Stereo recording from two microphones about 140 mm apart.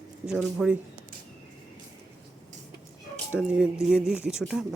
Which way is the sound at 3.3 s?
5° right (ahead or behind).